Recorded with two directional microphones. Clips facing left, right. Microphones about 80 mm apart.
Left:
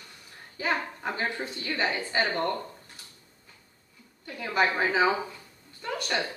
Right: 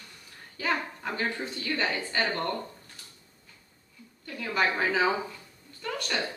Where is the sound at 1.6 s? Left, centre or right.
Centre.